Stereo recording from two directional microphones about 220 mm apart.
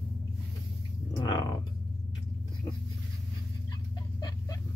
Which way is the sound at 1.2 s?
15° left (ahead or behind).